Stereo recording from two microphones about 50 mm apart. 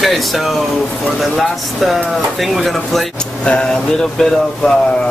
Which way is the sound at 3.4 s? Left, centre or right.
Centre.